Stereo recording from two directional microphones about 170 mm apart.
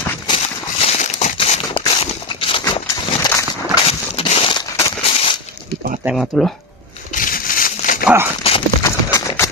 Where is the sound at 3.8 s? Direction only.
35° left (ahead or behind).